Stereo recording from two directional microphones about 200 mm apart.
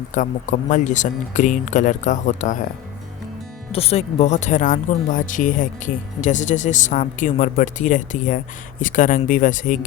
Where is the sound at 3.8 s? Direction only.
30° left (ahead or behind).